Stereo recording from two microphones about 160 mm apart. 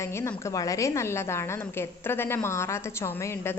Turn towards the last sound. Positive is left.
turn(degrees=15)  # may be behind; listen again after turning